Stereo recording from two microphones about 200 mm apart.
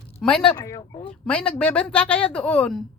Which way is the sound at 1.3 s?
5° left (ahead or behind).